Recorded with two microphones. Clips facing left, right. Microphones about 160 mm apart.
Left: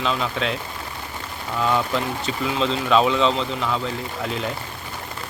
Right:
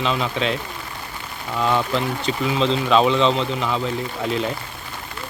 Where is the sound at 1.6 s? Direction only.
Centre (ahead or behind).